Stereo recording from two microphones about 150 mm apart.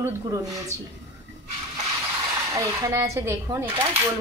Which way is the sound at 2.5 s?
20° right (ahead or behind).